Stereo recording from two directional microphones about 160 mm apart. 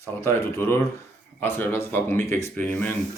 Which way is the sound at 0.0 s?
15° left (ahead or behind).